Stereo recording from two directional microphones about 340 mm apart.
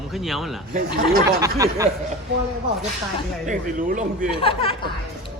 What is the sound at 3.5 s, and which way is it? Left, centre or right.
Speech, right.